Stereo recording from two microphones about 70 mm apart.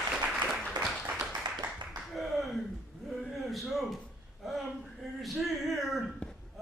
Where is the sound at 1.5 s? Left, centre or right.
Right.